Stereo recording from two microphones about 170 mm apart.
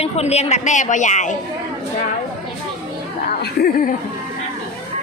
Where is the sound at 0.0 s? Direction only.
40° left (ahead or behind).